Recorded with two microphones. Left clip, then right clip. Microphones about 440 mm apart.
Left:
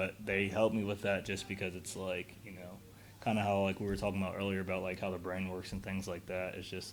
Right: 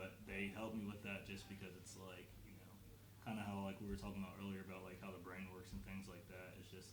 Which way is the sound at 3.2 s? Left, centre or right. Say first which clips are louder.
Left 17 dB; left.